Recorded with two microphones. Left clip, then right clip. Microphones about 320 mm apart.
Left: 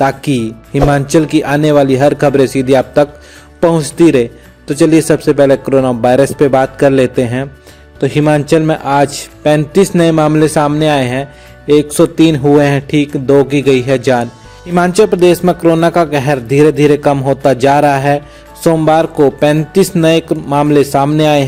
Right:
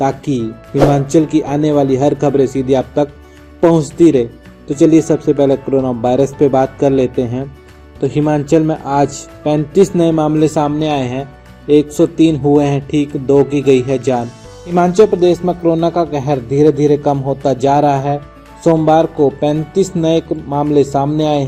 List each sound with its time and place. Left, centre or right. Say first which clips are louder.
0.0 s a man's voice: left 4 dB; left
19.2 s a man's voice: left 4 dB; left